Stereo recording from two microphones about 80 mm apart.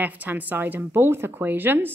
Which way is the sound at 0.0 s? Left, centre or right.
Right.